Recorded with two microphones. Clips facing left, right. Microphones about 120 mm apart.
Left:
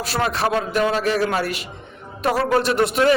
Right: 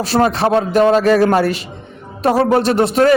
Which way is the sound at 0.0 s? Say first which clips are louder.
Right 7 dB; 30° right (ahead or behind).